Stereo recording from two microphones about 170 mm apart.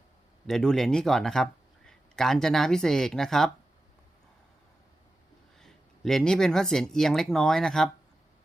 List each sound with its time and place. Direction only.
0.4 s speech: 5° left (ahead or behind)
5.5 s speech: centre (ahead or behind)